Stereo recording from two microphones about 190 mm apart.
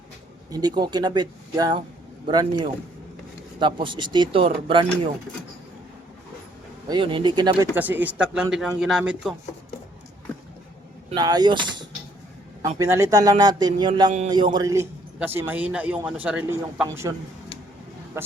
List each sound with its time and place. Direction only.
0.5 s speech: 20° right (ahead or behind)
6.8 s speech: 25° right (ahead or behind)
7.8 s speech: 10° right (ahead or behind)
11.1 s a man's voice: 20° right (ahead or behind)